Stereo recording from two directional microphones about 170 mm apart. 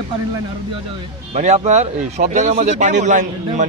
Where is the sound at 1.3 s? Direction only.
40° right (ahead or behind).